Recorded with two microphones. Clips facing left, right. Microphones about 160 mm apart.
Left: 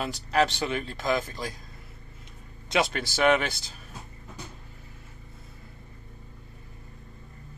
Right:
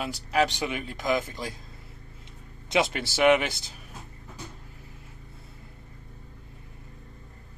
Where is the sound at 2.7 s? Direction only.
20° right (ahead or behind).